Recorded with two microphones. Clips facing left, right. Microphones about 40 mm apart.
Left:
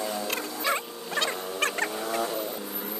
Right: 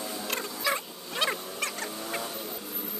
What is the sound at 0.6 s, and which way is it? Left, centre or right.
Rodents, left.